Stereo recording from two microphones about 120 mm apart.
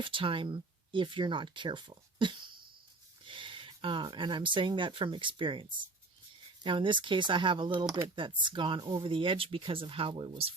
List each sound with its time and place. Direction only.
0.0 s speech: 45° right (ahead or behind)